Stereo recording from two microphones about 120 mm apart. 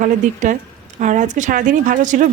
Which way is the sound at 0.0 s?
90° right.